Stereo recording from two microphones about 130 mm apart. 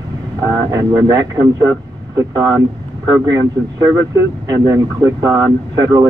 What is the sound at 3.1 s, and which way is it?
Speech, 30° right (ahead or behind).